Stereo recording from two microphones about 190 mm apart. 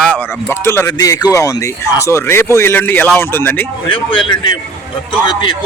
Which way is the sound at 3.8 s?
25° left (ahead or behind).